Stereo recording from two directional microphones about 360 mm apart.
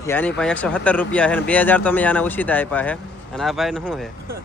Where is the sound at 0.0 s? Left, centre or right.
Centre.